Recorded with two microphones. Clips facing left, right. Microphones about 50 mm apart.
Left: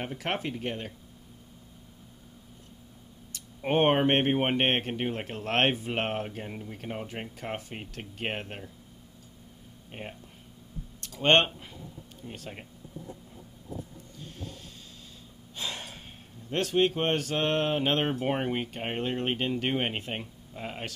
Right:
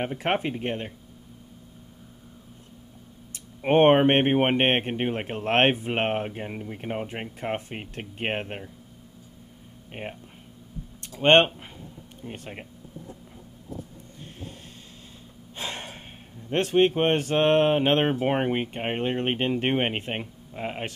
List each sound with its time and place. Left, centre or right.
0.0 s speech: right
3.3 s speech: right
9.8 s speech: right
11.0 s a sound: right
12.3 s speech: right
15.5 s gasp: right
16.4 s speech: right